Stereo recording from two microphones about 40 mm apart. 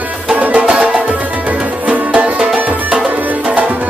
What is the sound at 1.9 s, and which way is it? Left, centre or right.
Music, right.